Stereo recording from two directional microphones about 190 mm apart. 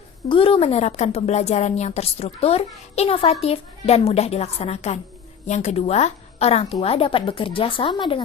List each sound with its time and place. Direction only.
0.3 s a woman's voice: 30° left (ahead or behind)